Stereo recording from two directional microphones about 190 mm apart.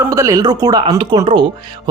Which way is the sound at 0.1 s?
15° right (ahead or behind).